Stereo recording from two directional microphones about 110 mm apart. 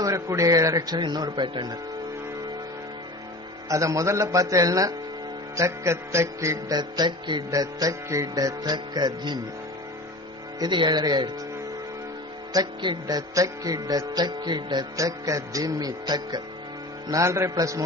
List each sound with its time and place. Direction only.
0.0 s music: 30° right (ahead or behind)
3.6 s speech: 30° right (ahead or behind)
5.6 s music: 25° right (ahead or behind); by 7.4 s 40° right (ahead or behind)
7.5 s music: 30° right (ahead or behind)
8.7 s music: 40° right (ahead or behind)
10.6 s music: 40° right (ahead or behind)
12.5 s music: 40° right (ahead or behind)
17.1 s speech: 25° right (ahead or behind)